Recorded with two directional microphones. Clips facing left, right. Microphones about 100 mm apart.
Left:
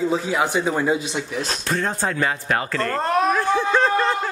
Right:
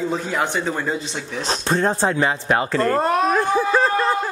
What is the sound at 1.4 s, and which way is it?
Speech, 30° right (ahead or behind).